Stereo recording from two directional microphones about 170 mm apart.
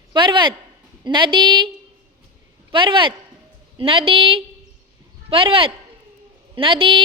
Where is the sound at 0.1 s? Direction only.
25° right (ahead or behind).